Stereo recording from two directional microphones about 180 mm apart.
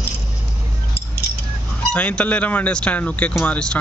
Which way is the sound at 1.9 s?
5° left (ahead or behind).